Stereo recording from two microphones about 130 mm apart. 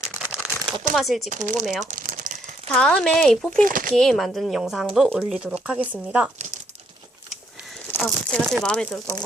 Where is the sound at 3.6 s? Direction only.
90° right.